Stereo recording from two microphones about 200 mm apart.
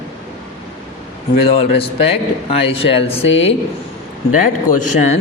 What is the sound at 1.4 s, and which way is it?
A man's voice, 30° left (ahead or behind).